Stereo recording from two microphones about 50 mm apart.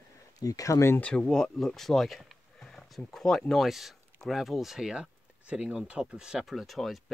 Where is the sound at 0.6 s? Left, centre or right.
Left.